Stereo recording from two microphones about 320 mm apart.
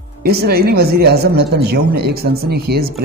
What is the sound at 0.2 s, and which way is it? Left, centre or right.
Speech, right.